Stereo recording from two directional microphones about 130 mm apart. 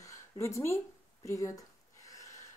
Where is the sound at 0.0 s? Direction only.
25° left (ahead or behind).